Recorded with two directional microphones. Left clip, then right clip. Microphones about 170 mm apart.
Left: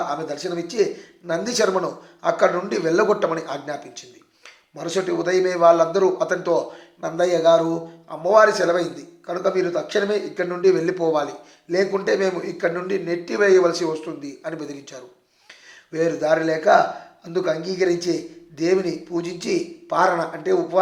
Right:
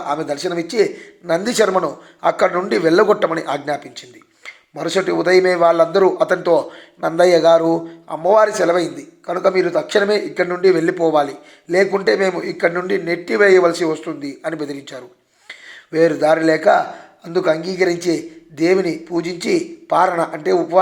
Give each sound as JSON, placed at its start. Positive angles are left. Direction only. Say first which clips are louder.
{"t": 0.1, "sound": "speech", "louder": "right 6 dB", "side_deg": -30}